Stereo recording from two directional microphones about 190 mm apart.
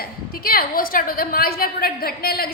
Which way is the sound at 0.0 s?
50° left (ahead or behind).